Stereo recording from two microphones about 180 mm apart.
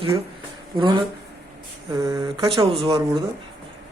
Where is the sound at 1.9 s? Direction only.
20° right (ahead or behind).